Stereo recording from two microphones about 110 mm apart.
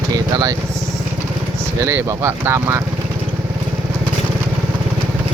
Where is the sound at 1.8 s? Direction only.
25° right (ahead or behind).